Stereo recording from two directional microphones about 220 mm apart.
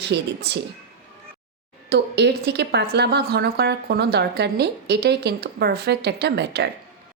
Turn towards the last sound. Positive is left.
turn(degrees=-50)  # may be behind; listen again after turning